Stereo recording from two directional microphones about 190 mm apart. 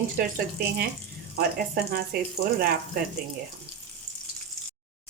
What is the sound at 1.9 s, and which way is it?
Speech, 55° right (ahead or behind).